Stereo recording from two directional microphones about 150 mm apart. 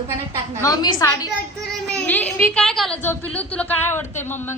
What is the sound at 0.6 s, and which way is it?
Speech, 25° left (ahead or behind).